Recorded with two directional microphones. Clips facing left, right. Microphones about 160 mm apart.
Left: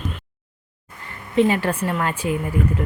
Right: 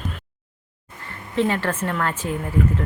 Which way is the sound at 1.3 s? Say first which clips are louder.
Left 4 dB; 15° left (ahead or behind).